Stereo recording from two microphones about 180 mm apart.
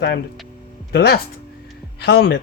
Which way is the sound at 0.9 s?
65° left (ahead or behind).